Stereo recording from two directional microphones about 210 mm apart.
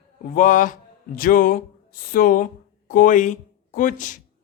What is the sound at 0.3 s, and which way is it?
A man's voice, 40° left (ahead or behind).